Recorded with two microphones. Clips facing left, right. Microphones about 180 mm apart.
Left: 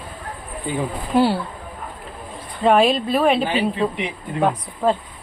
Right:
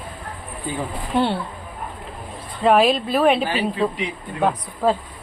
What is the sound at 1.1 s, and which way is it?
Speech, 5° left (ahead or behind).